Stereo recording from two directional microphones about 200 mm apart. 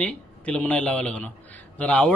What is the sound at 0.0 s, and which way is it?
Speech, 5° left (ahead or behind).